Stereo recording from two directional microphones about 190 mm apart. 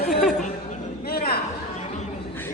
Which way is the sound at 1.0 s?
55° left (ahead or behind).